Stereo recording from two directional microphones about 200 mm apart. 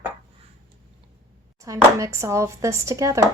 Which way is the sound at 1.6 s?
15° right (ahead or behind).